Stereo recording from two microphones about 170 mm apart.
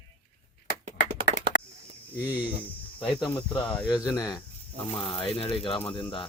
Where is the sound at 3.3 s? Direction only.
25° left (ahead or behind).